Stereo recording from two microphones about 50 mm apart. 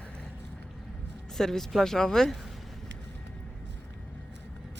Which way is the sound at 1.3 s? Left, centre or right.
Centre.